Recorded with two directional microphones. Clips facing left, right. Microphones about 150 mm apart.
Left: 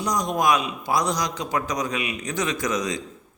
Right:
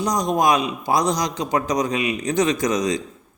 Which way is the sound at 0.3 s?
20° right (ahead or behind).